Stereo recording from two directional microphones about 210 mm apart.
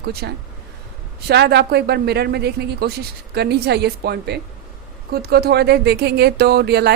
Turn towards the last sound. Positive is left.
turn(degrees=-50)  # may be behind; listen again after turning